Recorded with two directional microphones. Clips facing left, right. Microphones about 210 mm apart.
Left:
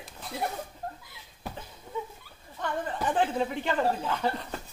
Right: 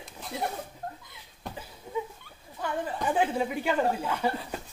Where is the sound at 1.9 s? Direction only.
10° right (ahead or behind).